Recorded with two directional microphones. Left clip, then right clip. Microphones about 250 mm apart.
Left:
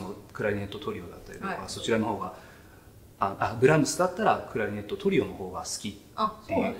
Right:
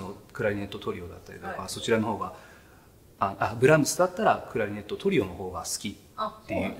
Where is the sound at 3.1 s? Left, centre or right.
Right.